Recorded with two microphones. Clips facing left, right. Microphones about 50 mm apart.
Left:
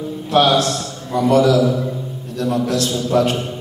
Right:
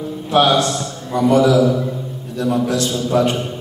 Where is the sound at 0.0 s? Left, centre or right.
Centre.